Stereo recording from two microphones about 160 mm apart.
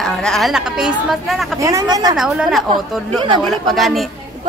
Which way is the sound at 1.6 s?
20° right (ahead or behind).